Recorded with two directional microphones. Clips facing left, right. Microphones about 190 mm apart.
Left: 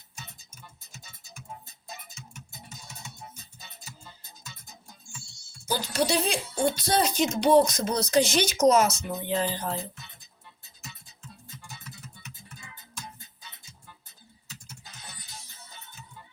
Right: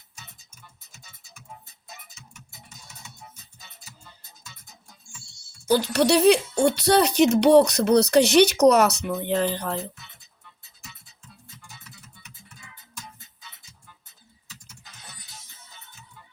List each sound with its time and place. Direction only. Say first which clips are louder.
5.6 s speech: right 7 dB; 65° right (ahead or behind)